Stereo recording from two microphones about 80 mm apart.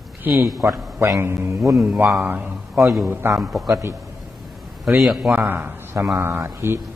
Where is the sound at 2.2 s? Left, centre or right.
Right.